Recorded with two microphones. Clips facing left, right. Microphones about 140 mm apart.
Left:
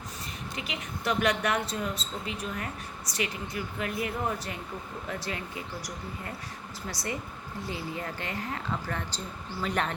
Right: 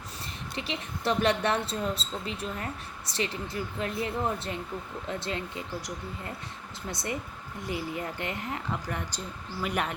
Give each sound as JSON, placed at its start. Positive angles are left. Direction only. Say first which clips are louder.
{"t": 0.5, "sound": "a woman's voice", "louder": "right 3 dB", "side_deg": -30}